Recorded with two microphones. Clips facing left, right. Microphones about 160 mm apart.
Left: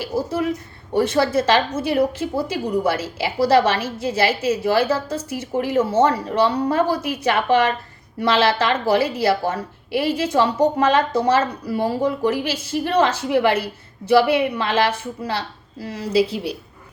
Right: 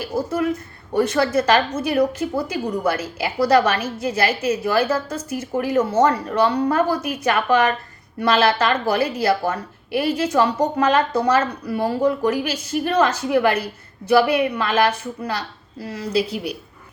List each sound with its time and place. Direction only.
0.0 s a woman's voice: 30° left (ahead or behind)